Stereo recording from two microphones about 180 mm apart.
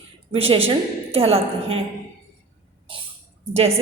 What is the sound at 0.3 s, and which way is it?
A woman's voice, 30° right (ahead or behind).